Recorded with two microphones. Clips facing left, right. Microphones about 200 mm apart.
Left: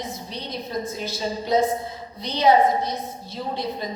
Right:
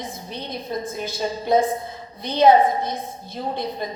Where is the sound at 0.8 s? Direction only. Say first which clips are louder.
Right 1 dB; 55° right (ahead or behind).